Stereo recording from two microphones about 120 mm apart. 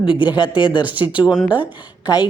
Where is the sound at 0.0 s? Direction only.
40° left (ahead or behind).